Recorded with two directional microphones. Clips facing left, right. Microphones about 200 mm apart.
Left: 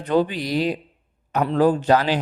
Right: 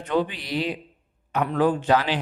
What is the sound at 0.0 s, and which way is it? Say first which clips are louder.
A man's voice: left 4 dB; 40° left (ahead or behind).